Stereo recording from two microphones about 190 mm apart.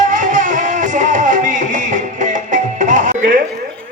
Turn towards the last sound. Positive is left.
turn(degrees=-40)  # may be behind; listen again after turning